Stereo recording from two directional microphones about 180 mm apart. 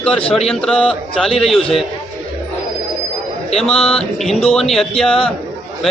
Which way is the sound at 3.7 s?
30° left (ahead or behind).